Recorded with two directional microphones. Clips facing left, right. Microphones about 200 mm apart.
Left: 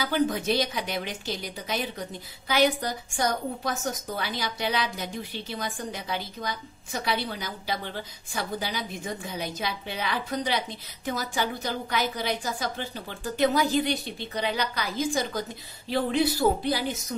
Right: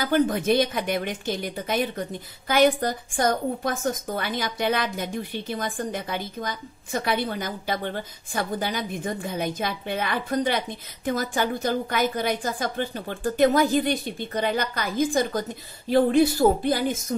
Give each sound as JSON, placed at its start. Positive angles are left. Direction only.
{"t": 0.0, "sound": "a woman's voice", "side_deg": -50}